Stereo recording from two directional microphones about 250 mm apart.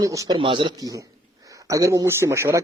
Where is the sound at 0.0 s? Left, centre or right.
Centre.